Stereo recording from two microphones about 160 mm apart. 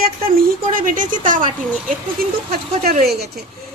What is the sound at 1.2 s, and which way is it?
Speech, 55° right (ahead or behind).